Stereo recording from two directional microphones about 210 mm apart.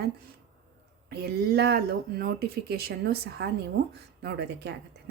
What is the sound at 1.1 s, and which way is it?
A woman's voice, 50° right (ahead or behind).